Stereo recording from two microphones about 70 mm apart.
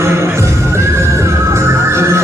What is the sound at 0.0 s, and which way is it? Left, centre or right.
Music, right.